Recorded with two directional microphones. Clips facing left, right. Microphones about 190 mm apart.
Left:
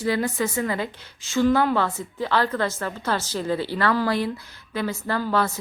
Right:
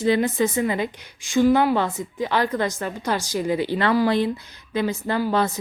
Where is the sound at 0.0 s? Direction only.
20° right (ahead or behind).